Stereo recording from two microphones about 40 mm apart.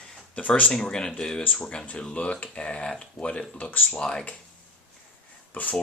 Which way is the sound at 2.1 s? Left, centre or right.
Left.